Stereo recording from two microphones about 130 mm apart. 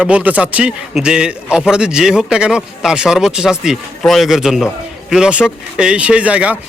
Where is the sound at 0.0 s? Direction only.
10° right (ahead or behind).